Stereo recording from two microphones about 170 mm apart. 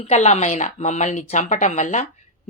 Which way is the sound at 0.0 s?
40° left (ahead or behind).